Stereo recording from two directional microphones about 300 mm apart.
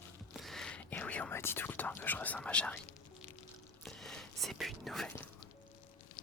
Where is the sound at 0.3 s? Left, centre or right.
Centre.